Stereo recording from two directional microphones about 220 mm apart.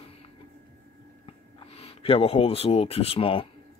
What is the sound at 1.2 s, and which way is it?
Speech, 25° left (ahead or behind).